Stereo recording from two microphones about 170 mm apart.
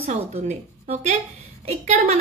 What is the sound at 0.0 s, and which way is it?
A woman's voice, 40° right (ahead or behind).